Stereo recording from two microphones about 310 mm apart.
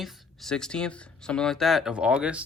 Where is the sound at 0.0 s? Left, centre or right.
Centre.